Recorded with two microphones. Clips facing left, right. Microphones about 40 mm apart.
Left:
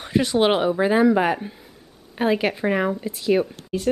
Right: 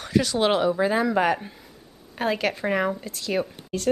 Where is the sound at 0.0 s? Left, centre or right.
Left.